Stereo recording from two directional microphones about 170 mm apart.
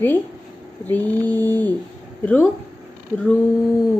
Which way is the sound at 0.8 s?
10° left (ahead or behind).